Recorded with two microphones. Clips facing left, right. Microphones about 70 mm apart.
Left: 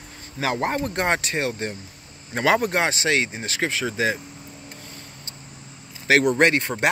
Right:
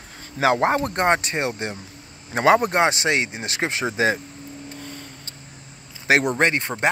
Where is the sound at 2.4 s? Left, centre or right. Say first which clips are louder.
Right 3 dB; right.